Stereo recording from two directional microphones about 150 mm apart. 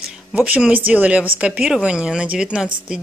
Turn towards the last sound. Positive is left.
turn(degrees=-5)  # may be behind; listen again after turning